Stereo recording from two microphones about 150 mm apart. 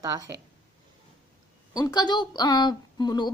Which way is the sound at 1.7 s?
25° left (ahead or behind).